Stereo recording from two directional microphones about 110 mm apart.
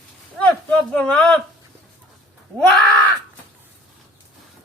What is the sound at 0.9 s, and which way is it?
Speech, 10° left (ahead or behind).